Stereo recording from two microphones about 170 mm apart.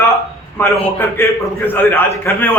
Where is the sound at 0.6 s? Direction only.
10° left (ahead or behind).